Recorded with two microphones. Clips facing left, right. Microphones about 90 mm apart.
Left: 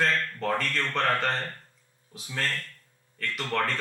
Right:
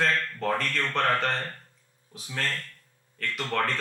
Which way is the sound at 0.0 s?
20° right (ahead or behind).